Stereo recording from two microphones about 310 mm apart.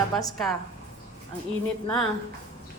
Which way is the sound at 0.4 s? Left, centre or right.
Centre.